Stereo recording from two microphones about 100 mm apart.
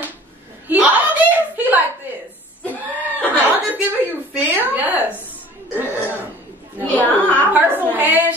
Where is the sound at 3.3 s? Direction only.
20° right (ahead or behind).